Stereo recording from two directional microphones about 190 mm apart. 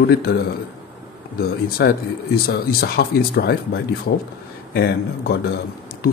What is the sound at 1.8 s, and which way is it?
Speech, 60° left (ahead or behind).